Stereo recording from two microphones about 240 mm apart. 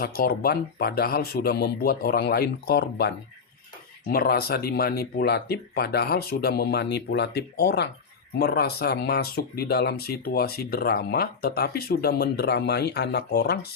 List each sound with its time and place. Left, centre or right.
0.0 s speech: left
4.1 s speech: left